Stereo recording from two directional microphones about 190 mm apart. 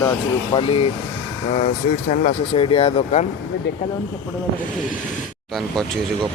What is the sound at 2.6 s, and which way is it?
Speech, 30° left (ahead or behind).